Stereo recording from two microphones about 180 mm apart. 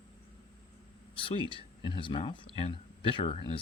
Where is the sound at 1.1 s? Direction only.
30° left (ahead or behind).